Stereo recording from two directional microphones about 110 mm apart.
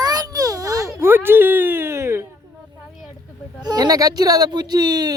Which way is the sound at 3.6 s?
35° right (ahead or behind).